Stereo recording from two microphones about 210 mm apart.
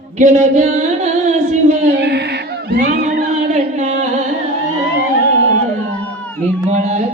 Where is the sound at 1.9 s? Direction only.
55° right (ahead or behind).